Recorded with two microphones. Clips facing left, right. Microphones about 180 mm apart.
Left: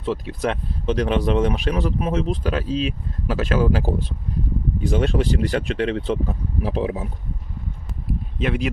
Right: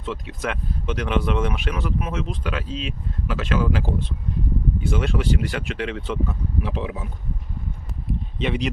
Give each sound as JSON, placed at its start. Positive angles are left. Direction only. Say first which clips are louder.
{"t": 0.0, "sound": "speech", "louder": "left 5 dB", "side_deg": 35}
{"t": 8.4, "sound": "speech", "louder": "left 1 dB", "side_deg": 5}